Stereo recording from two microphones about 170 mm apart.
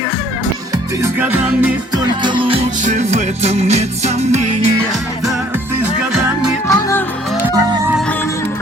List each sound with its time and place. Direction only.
1.0 s music: 10° right (ahead or behind)
1.9 s music: 30° right (ahead or behind)
2.8 s music: 45° right (ahead or behind)
6.7 s music: 20° left (ahead or behind)